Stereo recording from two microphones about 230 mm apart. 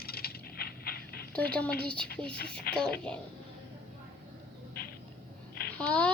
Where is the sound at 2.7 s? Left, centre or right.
Left.